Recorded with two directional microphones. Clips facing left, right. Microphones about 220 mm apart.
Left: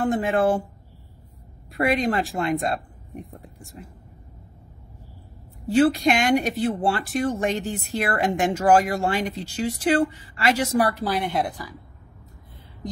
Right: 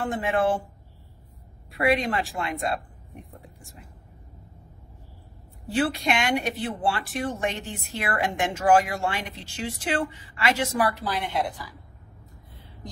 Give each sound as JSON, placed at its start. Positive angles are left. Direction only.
{"t": 0.0, "sound": "a woman's voice", "side_deg": 40}
{"t": 1.7, "sound": "a woman's voice", "side_deg": 40}
{"t": 5.8, "sound": "a woman's voice", "side_deg": 40}